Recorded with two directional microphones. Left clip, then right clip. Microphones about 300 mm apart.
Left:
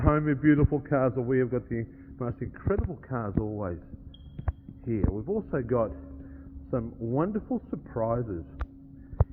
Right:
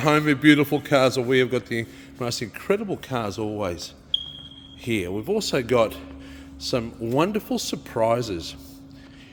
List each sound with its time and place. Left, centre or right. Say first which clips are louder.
0.0 s a man's voice: right 7 dB; centre
4.9 s a man's voice: right 6 dB; right